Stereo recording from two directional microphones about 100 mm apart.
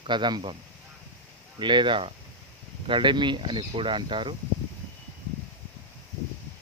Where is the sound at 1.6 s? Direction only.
55° right (ahead or behind).